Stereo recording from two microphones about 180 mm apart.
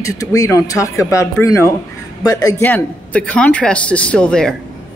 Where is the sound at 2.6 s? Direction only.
10° left (ahead or behind).